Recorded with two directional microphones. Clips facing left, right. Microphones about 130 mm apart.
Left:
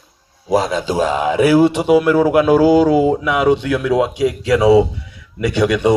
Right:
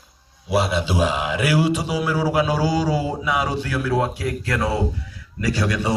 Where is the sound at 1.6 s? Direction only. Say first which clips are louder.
Left 9 dB; 60° left (ahead or behind).